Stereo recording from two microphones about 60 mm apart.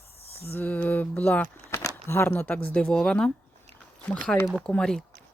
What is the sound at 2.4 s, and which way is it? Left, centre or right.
Speech, left.